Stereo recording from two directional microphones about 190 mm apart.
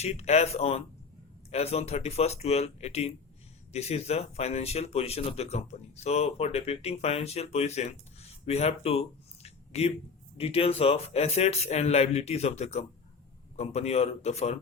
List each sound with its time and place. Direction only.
0.0 s speech: 35° left (ahead or behind)